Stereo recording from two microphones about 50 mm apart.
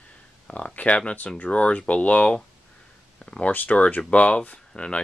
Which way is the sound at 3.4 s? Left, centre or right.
Left.